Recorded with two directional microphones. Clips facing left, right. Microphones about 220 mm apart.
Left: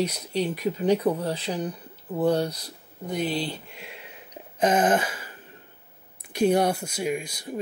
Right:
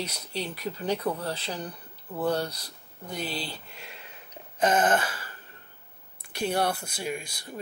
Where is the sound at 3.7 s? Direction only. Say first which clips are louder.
Left 4 dB; 5° left (ahead or behind).